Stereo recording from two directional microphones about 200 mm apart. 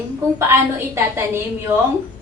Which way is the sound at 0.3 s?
15° right (ahead or behind).